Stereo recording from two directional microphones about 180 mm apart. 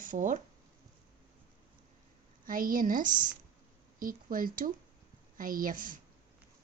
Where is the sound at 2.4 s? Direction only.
50° right (ahead or behind).